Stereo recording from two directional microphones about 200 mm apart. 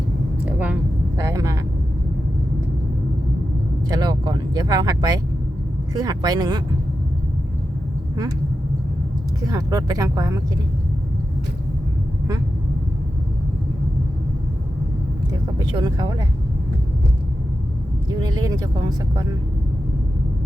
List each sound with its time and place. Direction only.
0.4 s a sound: 5° right (ahead or behind)
1.1 s vehicle: 15° right (ahead or behind)
3.8 s vehicle: 20° right (ahead or behind)
5.9 s speech: 20° right (ahead or behind)
9.5 s speech: 15° right (ahead or behind)
15.3 s speech: 20° right (ahead or behind)
18.2 s speech: 20° right (ahead or behind)